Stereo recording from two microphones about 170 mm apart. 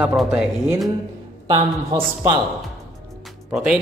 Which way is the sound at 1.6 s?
20° right (ahead or behind).